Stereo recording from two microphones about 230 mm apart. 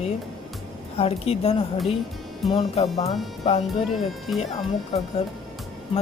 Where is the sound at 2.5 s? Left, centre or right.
Left.